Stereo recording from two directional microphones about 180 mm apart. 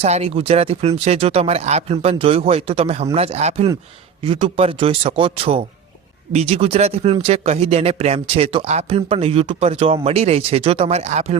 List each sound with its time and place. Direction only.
0.0 s speech: 35° right (ahead or behind)